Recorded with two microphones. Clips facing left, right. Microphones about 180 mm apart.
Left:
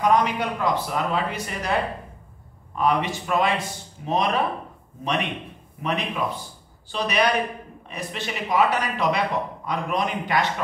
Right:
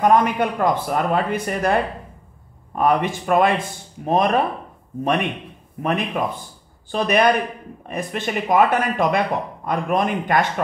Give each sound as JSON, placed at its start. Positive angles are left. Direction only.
{"t": 0.0, "sound": "a man's voice", "side_deg": -50}